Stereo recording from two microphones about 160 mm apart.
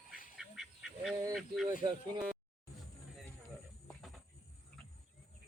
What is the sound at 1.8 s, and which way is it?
Speech, 30° right (ahead or behind).